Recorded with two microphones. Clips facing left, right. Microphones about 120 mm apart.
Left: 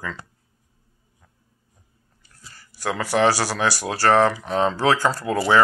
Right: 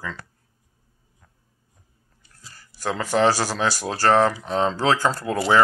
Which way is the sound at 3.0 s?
10° left (ahead or behind).